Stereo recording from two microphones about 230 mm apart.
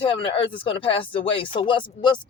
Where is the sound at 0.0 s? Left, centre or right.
Left.